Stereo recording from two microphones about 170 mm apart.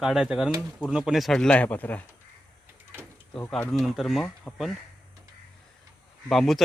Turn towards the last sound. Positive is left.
turn(degrees=0)  # may be behind; listen again after turning